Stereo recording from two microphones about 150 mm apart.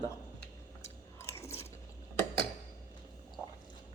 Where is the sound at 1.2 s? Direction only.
20° left (ahead or behind).